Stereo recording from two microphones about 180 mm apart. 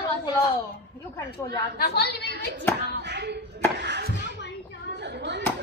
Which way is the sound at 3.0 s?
70° right (ahead or behind).